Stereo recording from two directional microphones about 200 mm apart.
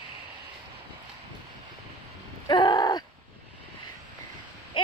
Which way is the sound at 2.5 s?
20° left (ahead or behind).